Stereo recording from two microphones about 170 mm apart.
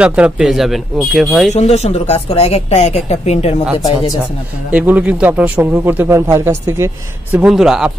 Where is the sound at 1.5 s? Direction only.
40° left (ahead or behind).